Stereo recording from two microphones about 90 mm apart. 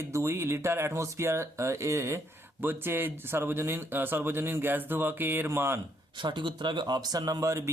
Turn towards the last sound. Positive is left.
turn(degrees=-40)  # may be behind; listen again after turning